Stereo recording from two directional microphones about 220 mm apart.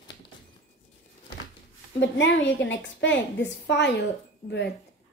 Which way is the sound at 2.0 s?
55° left (ahead or behind).